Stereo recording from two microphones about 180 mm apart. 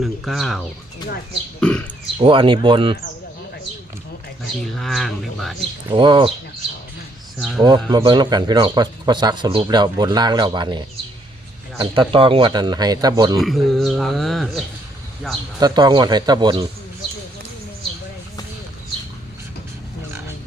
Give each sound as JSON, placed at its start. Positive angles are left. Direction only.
{"t": 0.0, "sound": "speech", "side_deg": 0}
{"t": 1.6, "sound": "beatboxing", "side_deg": 5}
{"t": 2.1, "sound": "speech", "side_deg": -30}
{"t": 4.6, "sound": "speech", "side_deg": 0}
{"t": 5.9, "sound": "speech", "side_deg": -25}
{"t": 7.3, "sound": "speech", "side_deg": 0}
{"t": 7.6, "sound": "speech", "side_deg": -25}
{"t": 13.4, "sound": "speech", "side_deg": 0}
{"t": 15.6, "sound": "speech", "side_deg": -25}